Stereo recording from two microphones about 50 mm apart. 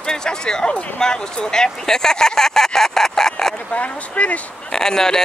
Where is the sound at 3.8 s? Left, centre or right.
Left.